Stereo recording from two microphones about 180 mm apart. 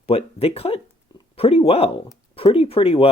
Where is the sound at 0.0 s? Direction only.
35° left (ahead or behind).